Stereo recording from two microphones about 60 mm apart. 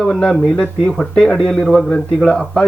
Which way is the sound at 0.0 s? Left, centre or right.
Centre.